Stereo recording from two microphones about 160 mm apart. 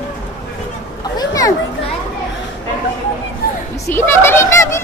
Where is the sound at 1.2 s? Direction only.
25° left (ahead or behind).